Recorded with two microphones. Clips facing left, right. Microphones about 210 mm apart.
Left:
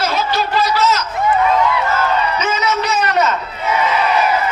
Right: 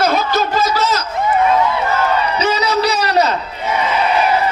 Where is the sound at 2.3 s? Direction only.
35° right (ahead or behind).